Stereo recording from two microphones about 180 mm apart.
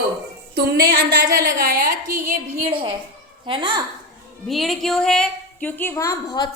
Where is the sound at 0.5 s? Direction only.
55° right (ahead or behind).